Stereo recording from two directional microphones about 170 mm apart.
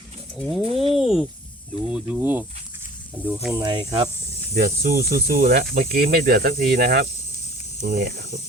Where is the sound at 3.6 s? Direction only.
25° right (ahead or behind).